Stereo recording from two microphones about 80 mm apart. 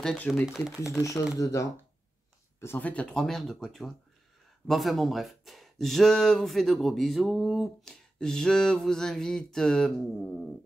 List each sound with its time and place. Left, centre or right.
0.3 s speech: centre
1.0 s speech: left
2.8 s speech: centre